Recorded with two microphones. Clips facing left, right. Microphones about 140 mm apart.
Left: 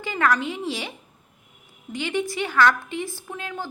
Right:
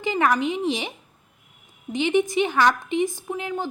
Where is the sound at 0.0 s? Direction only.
20° right (ahead or behind).